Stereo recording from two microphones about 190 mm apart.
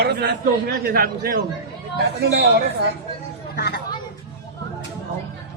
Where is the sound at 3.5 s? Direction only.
60° left (ahead or behind).